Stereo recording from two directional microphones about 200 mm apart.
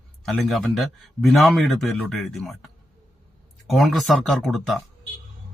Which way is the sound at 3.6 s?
Centre (ahead or behind).